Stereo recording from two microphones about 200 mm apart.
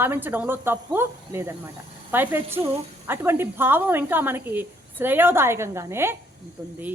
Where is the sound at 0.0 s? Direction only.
10° right (ahead or behind).